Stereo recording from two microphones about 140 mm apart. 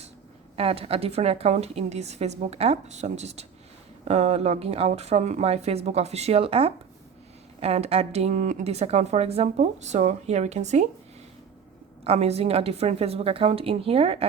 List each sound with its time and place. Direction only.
0.5 s speech: 45° right (ahead or behind)
12.0 s speech: 45° right (ahead or behind)